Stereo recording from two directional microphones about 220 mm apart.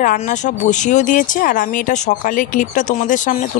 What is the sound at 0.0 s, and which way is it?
Speech, 35° left (ahead or behind).